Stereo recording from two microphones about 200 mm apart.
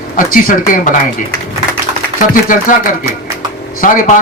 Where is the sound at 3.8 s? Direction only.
40° left (ahead or behind).